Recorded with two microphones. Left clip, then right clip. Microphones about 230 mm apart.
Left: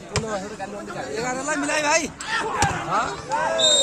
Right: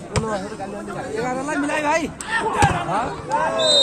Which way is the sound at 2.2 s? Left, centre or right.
Centre.